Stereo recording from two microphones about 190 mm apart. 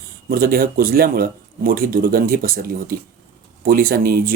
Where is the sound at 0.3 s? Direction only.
50° right (ahead or behind).